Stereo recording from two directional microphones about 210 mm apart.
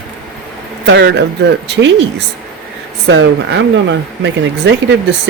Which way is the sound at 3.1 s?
65° right (ahead or behind).